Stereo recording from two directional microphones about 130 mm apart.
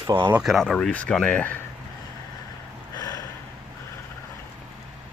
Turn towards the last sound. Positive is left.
turn(degrees=30)  # may be behind; listen again after turning